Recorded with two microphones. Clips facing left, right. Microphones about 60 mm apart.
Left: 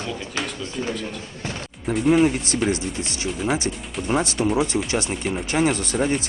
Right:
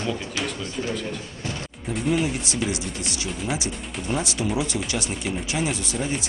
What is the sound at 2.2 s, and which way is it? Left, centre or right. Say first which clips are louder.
Speech: left 7 dB; left.